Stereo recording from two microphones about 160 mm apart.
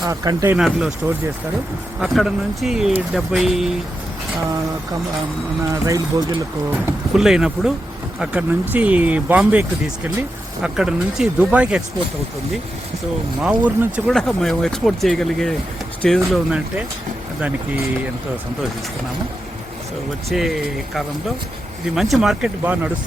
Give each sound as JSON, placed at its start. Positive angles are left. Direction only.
{"t": 0.0, "sound": "speech", "side_deg": -20}
{"t": 0.5, "sound": "speech", "side_deg": -5}
{"t": 2.0, "sound": "speech", "side_deg": 0}
{"t": 5.7, "sound": "speech", "side_deg": -20}
{"t": 6.8, "sound": "speech", "side_deg": -5}
{"t": 13.4, "sound": "speech", "side_deg": -5}
{"t": 20.3, "sound": "speech", "side_deg": 0}